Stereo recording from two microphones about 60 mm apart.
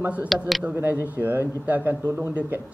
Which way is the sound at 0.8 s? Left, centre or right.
Right.